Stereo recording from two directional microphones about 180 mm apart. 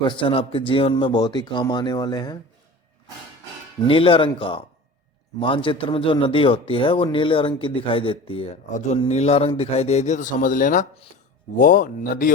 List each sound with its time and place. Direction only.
0.0 s a man's voice: 25° left (ahead or behind)
3.8 s a man's voice: 30° left (ahead or behind)
8.7 s speech: 40° left (ahead or behind)